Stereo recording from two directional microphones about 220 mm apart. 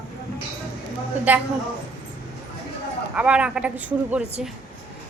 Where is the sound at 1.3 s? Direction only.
5° right (ahead or behind).